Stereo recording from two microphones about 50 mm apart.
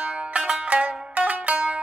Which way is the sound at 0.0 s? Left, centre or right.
Right.